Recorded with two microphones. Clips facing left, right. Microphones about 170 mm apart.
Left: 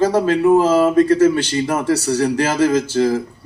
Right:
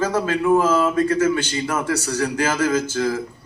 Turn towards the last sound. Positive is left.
turn(degrees=35)  # may be behind; listen again after turning